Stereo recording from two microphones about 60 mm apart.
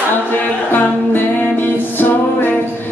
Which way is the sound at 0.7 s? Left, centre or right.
Left.